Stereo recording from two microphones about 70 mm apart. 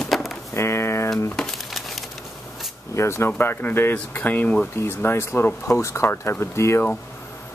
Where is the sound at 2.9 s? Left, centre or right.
Left.